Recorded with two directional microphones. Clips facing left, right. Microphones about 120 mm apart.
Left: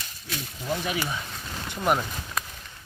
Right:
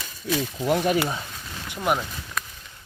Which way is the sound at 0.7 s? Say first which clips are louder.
Right 7 dB; 55° right (ahead or behind).